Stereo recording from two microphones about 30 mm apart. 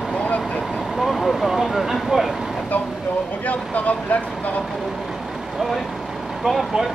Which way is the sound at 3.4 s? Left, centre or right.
Left.